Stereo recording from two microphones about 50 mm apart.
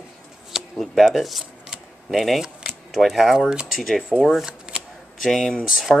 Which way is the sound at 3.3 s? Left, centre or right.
Centre.